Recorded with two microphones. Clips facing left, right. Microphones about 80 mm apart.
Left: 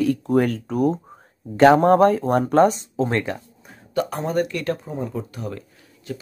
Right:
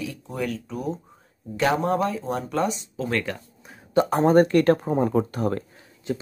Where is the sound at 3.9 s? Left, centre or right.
Right.